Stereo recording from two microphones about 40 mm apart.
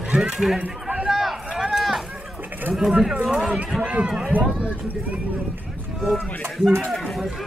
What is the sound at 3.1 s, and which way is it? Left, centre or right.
A man's voice, right.